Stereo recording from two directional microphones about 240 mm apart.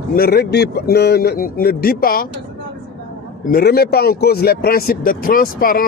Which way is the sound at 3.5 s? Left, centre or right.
Left.